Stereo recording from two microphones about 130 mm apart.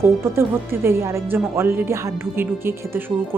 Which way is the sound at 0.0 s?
20° right (ahead or behind).